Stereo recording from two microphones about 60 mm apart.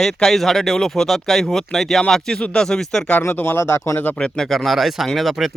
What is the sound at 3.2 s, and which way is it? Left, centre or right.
Speech, left.